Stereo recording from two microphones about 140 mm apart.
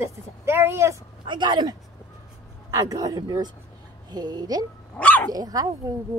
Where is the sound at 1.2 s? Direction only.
35° right (ahead or behind).